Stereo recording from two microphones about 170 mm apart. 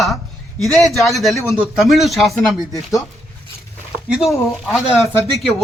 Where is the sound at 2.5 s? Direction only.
20° left (ahead or behind).